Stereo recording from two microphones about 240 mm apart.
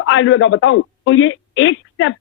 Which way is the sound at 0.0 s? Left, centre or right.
Left.